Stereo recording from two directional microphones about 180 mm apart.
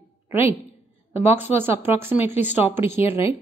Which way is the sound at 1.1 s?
10° right (ahead or behind).